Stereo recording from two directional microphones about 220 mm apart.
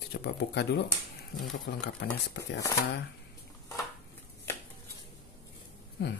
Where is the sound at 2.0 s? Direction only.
50° left (ahead or behind).